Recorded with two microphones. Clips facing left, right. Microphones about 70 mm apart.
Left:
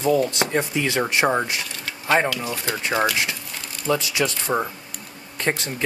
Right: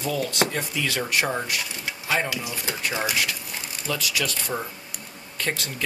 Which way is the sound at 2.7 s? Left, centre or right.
Left.